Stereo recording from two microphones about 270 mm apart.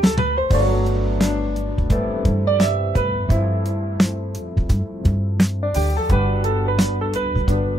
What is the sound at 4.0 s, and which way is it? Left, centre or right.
Music, centre.